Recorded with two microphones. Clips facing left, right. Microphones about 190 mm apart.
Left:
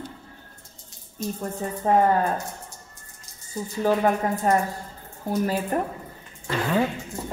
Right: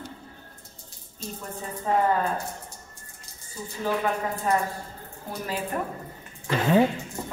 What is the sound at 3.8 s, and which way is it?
Speech, 40° left (ahead or behind).